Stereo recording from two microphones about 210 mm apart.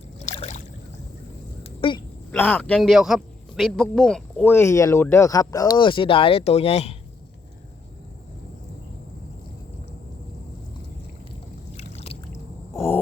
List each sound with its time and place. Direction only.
0.3 s rowboat: 30° left (ahead or behind)
1.6 s a sound: 25° left (ahead or behind)
2.3 s a man's voice: 5° left (ahead or behind); by 6.9 s 30° left (ahead or behind)
11.8 s boat: 30° left (ahead or behind)